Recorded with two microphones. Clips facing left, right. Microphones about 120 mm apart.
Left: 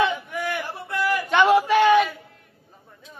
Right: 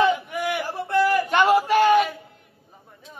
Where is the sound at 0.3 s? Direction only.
15° right (ahead or behind).